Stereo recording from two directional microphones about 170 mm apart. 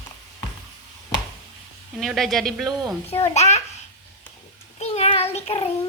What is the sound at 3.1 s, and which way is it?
Speech, 40° left (ahead or behind).